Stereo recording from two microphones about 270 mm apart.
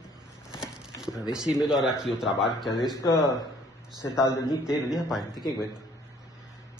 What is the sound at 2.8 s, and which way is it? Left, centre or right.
Speech, centre.